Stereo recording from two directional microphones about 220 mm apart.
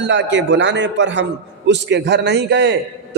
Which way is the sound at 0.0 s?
55° right (ahead or behind).